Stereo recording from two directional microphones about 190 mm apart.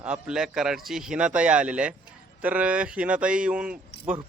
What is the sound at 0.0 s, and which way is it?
A man's voice, 5° right (ahead or behind).